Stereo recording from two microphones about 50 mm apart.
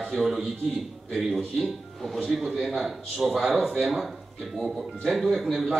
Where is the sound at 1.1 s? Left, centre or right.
Centre.